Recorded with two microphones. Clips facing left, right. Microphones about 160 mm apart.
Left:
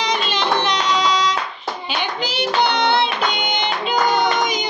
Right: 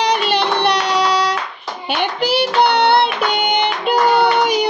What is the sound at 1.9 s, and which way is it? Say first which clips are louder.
Child singing: right 8 dB; 65° right (ahead or behind).